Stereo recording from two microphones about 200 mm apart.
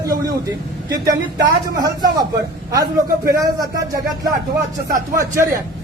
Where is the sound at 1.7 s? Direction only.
20° right (ahead or behind).